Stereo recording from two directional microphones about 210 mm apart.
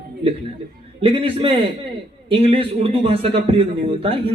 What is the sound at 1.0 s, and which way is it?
A man's voice, 25° right (ahead or behind).